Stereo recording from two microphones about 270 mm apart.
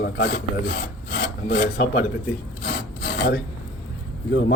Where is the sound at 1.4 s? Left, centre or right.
Left.